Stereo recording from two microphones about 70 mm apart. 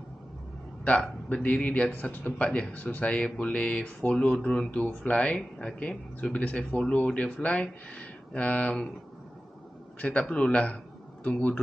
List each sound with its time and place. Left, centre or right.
0.8 s speech: centre
9.9 s a man's voice: centre